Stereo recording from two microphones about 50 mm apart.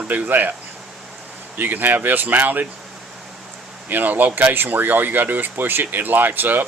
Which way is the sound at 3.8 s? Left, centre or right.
Right.